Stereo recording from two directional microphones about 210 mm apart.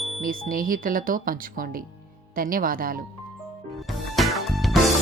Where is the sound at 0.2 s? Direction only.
40° right (ahead or behind).